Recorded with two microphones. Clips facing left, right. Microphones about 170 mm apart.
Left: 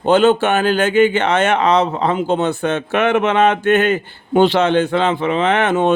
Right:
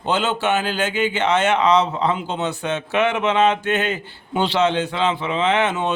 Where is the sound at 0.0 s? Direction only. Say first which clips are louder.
Left 9 dB; 55° left (ahead or behind).